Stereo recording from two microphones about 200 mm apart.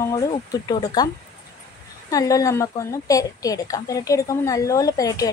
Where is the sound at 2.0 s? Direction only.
15° left (ahead or behind).